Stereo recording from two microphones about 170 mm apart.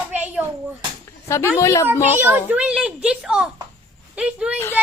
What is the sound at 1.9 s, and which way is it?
Speech, 10° right (ahead or behind).